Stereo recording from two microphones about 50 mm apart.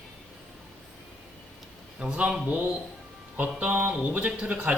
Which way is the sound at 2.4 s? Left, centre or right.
Right.